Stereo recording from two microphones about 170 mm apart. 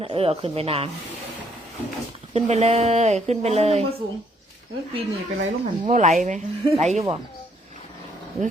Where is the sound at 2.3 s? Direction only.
40° right (ahead or behind).